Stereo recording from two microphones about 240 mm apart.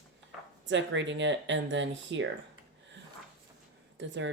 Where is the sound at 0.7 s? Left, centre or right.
Right.